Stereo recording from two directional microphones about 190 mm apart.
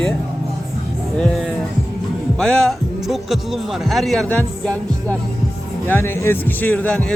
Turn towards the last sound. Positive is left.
turn(degrees=5)  # may be behind; listen again after turning